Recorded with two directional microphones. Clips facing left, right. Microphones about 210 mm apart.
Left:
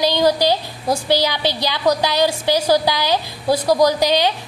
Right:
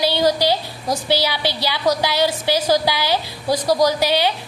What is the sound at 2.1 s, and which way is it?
A woman's voice, 10° left (ahead or behind).